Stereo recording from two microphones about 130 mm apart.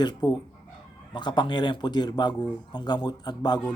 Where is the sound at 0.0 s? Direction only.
30° left (ahead or behind).